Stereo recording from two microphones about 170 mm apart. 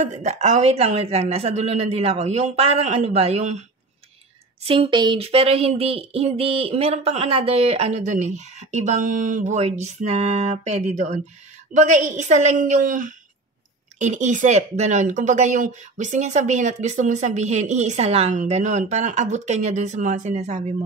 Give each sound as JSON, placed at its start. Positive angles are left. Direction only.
{"t": 0.0, "sound": "speech", "side_deg": -45}
{"t": 4.6, "sound": "speech", "side_deg": -30}